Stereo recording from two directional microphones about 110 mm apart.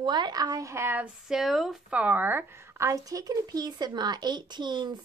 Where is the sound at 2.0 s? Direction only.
15° right (ahead or behind).